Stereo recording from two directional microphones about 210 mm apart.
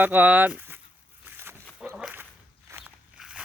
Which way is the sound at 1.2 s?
10° right (ahead or behind).